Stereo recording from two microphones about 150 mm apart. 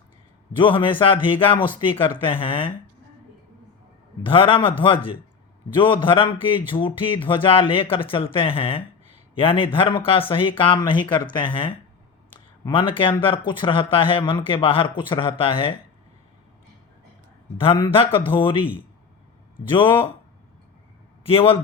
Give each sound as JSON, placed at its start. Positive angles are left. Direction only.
{"t": 0.5, "sound": "speech", "side_deg": 35}
{"t": 4.2, "sound": "speech", "side_deg": 35}
{"t": 5.7, "sound": "speech", "side_deg": 35}
{"t": 17.6, "sound": "speech", "side_deg": 35}
{"t": 19.7, "sound": "speech", "side_deg": 35}
{"t": 21.2, "sound": "speech", "side_deg": 40}